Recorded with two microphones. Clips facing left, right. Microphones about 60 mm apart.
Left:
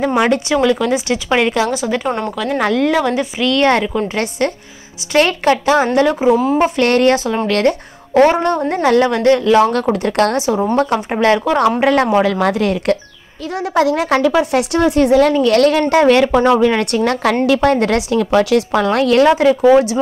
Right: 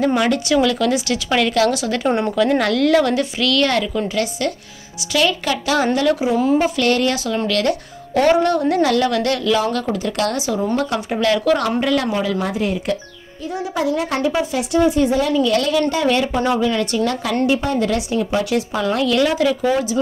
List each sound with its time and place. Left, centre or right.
0.0 s speech: centre
2.6 s a woman's voice: left
9.8 s a woman's voice: left
11.8 s speech: left
12.2 s a woman's voice: left
13.6 s a woman's voice: left
16.3 s speech: left
17.5 s a woman's voice: left
17.7 s speech: left
18.1 s speech: left